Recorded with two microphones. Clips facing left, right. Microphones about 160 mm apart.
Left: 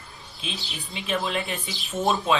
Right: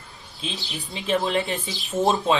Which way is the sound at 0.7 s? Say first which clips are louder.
Right 5 dB; 35° right (ahead or behind).